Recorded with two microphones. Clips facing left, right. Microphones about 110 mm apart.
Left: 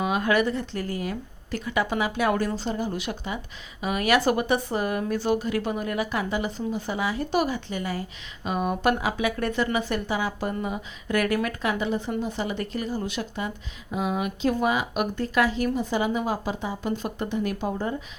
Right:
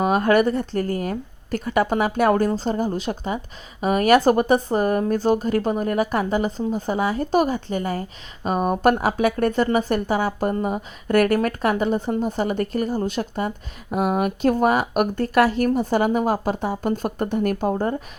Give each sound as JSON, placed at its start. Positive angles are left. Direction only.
{"t": 0.0, "sound": "a woman's voice", "side_deg": -45}